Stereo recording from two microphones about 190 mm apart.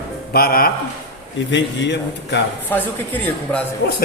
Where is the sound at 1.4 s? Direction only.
70° left (ahead or behind).